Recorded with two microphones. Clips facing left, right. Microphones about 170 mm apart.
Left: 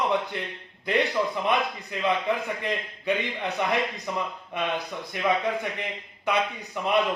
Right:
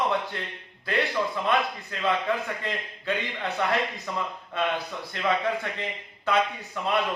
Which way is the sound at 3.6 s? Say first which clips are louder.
Even; 15° left (ahead or behind).